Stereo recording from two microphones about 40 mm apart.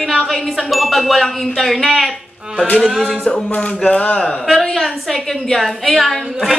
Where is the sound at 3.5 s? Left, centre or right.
Left.